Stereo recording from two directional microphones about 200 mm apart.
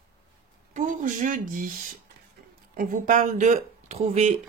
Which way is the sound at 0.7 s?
40° right (ahead or behind).